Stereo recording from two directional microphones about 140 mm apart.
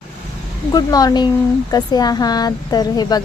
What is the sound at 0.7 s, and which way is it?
Speech, 25° left (ahead or behind).